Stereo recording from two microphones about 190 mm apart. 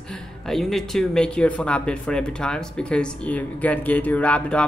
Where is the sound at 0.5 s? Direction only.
Centre (ahead or behind).